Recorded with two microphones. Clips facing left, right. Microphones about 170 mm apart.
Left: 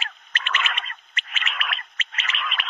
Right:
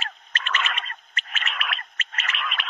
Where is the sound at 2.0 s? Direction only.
45° right (ahead or behind).